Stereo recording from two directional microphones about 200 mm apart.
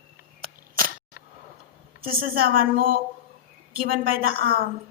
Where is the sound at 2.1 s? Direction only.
45° right (ahead or behind).